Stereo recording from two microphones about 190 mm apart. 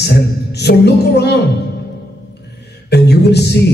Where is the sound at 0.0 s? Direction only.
60° left (ahead or behind).